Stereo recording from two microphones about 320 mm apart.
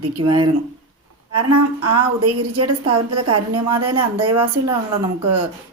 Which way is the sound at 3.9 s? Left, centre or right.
Centre.